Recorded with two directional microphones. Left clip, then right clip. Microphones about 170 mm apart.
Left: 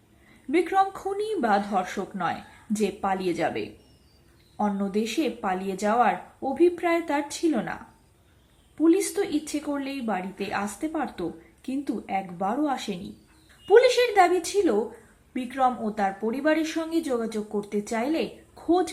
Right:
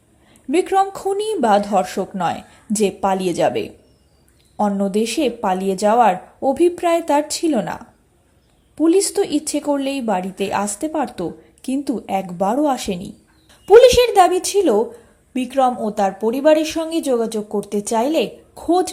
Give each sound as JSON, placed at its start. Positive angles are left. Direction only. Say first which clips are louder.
{"t": 0.5, "sound": "a woman's voice", "louder": "right 6 dB", "side_deg": -35}